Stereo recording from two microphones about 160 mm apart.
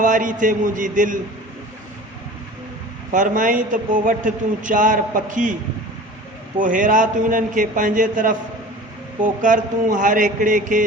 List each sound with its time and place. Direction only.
0.0 s a man's voice: 55° right (ahead or behind)
3.1 s a man's voice: 55° right (ahead or behind)
6.6 s a man's voice: 55° right (ahead or behind)